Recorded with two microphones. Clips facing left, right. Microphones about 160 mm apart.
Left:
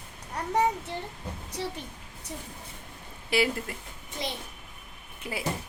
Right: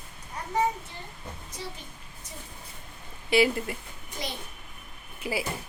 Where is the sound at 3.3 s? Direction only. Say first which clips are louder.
Right 4 dB; centre (ahead or behind).